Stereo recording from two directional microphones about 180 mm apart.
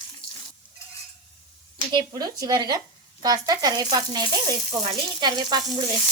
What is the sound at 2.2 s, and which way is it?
Speech, 20° right (ahead or behind).